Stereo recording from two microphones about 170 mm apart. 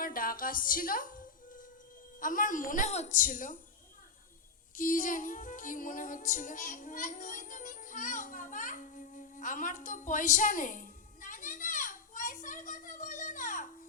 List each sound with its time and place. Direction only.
0.0 s a woman's voice: 55° left (ahead or behind)
4.7 s music: 55° left (ahead or behind)